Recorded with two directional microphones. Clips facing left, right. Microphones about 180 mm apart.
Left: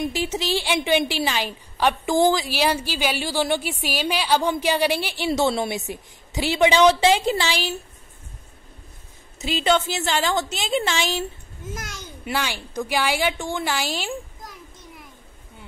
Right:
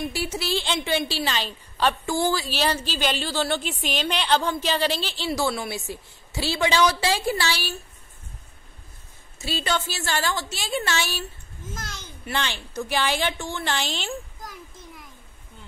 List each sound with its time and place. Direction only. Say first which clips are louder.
0.1 s a woman's voice: left 3 dB; 20° left (ahead or behind)
9.4 s a woman's voice: left 6 dB; 20° left (ahead or behind)
12.3 s a woman's voice: left 2 dB; 10° left (ahead or behind)